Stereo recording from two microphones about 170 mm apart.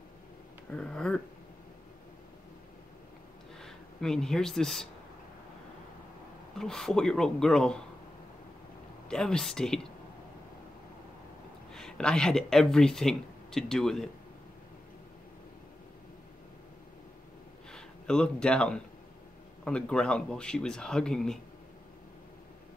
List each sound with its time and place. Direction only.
0.7 s speech: 5° left (ahead or behind)
3.5 s speech: 5° left (ahead or behind)
6.6 s speech: 5° left (ahead or behind)
9.1 s speech: 5° left (ahead or behind)
11.7 s speech: 5° left (ahead or behind)
17.6 s speech: 5° left (ahead or behind)